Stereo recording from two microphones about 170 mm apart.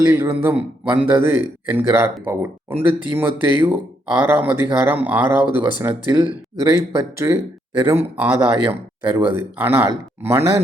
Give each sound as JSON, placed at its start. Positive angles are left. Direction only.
{"t": 0.0, "sound": "speech", "side_deg": -15}